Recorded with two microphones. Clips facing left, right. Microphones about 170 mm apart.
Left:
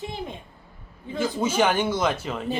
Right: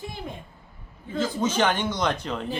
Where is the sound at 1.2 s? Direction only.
10° left (ahead or behind).